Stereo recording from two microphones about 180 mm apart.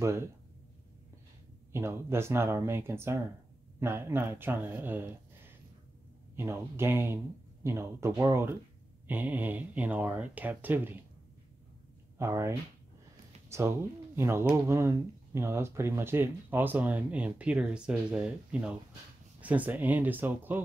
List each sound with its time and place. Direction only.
1.7 s speech: 15° right (ahead or behind)
6.3 s speech: 15° right (ahead or behind)
12.2 s speech: 15° right (ahead or behind)